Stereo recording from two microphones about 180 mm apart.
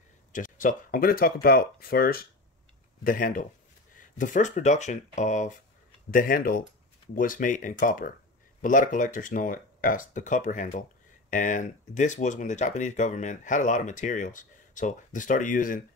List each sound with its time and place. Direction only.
0.3 s speech: 45° left (ahead or behind)